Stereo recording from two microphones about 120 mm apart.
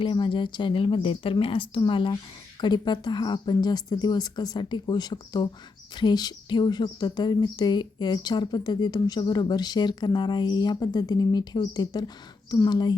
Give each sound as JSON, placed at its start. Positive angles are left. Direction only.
{"t": 0.0, "sound": "speech", "side_deg": 45}